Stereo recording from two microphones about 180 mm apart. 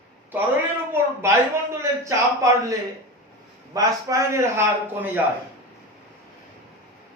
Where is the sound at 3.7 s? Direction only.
20° right (ahead or behind).